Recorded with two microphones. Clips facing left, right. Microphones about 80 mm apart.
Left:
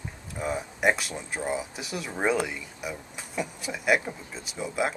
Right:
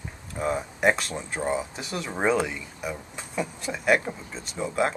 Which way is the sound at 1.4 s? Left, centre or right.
Centre.